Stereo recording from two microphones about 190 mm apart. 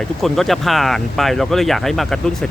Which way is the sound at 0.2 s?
Centre (ahead or behind).